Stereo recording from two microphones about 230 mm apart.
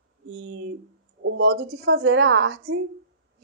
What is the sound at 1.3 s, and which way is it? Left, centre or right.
A woman's voice, right.